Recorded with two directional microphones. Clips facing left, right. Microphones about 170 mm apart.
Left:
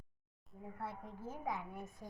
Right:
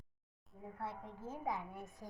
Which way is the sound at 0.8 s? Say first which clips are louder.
Even; 25° right (ahead or behind).